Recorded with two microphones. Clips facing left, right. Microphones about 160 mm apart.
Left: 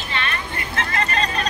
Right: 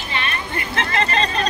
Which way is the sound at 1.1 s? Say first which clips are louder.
Right 3 dB; 30° right (ahead or behind).